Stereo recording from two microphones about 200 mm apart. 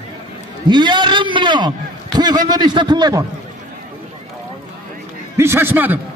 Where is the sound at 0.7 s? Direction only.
20° right (ahead or behind).